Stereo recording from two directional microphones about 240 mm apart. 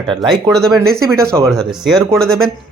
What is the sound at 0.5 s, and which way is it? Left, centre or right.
Speech, centre.